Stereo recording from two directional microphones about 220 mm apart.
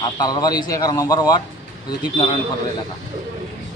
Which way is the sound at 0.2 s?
20° left (ahead or behind).